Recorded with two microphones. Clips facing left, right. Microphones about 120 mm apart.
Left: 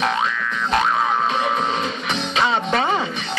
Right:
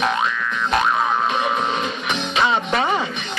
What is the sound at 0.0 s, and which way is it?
Boing, 30° left (ahead or behind).